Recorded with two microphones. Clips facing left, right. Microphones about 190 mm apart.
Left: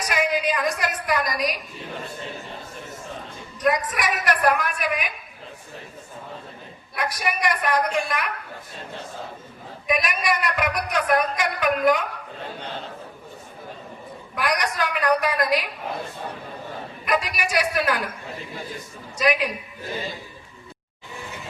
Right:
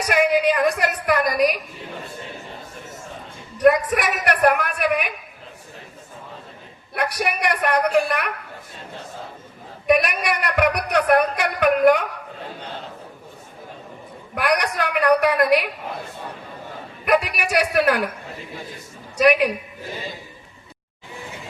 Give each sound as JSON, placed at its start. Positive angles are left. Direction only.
{"t": 0.1, "sound": "a woman's voice", "side_deg": -60}
{"t": 3.6, "sound": "a woman's voice", "side_deg": -60}
{"t": 6.9, "sound": "a woman's voice", "side_deg": -60}
{"t": 9.8, "sound": "a woman's voice", "side_deg": -65}
{"t": 14.3, "sound": "a woman's voice", "side_deg": -60}
{"t": 17.1, "sound": "a woman's voice", "side_deg": -60}
{"t": 19.1, "sound": "a woman's voice", "side_deg": -60}